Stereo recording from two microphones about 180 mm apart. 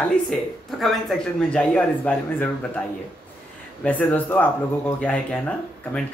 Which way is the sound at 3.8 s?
10° left (ahead or behind).